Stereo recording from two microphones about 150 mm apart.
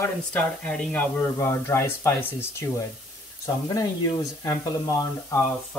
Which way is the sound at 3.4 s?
20° left (ahead or behind).